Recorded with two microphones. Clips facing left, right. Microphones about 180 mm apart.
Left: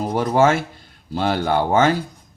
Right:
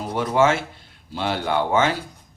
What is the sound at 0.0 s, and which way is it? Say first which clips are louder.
Speech: left 3 dB; 40° left (ahead or behind).